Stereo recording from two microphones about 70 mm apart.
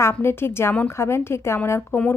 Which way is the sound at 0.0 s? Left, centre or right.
Left.